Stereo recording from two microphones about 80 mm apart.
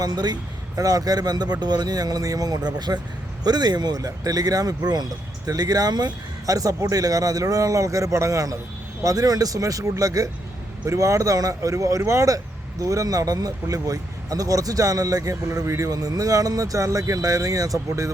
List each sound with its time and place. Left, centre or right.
0.0 s a man's voice: right